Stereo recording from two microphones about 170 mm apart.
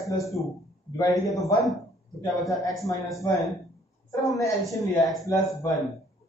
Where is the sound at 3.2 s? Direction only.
20° left (ahead or behind).